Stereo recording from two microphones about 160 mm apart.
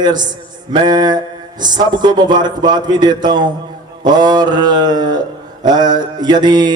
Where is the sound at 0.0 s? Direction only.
25° right (ahead or behind).